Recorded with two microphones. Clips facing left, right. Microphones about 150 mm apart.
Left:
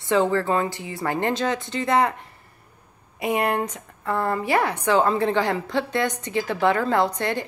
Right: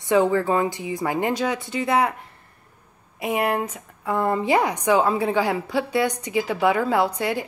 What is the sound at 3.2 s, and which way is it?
A woman's voice, centre (ahead or behind).